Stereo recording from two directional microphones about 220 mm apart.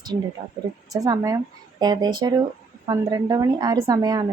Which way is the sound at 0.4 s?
20° right (ahead or behind).